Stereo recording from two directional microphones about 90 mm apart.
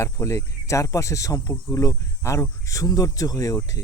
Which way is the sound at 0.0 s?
35° left (ahead or behind).